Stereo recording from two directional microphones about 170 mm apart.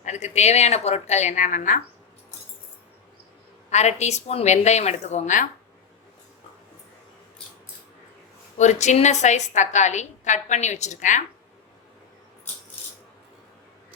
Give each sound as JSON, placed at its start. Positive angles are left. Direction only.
{"t": 0.0, "sound": "a woman's voice", "side_deg": 45}
{"t": 3.7, "sound": "a woman's voice", "side_deg": 40}
{"t": 8.5, "sound": "a woman's voice", "side_deg": 45}